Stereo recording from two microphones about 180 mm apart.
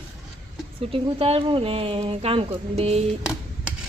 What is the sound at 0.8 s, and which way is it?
Speech, 30° right (ahead or behind).